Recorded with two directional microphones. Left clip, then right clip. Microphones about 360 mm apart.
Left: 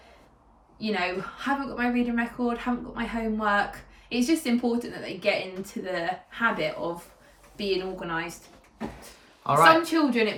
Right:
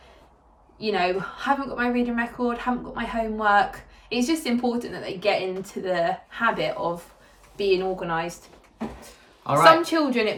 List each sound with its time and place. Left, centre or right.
0.8 s a woman's voice: centre
9.0 s a sound: centre
9.8 s a woman's voice: centre